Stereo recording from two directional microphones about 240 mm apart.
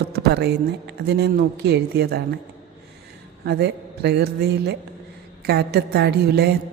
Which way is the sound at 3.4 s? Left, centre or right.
Right.